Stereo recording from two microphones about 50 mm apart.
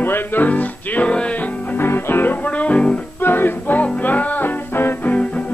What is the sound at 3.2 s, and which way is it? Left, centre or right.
Music, left.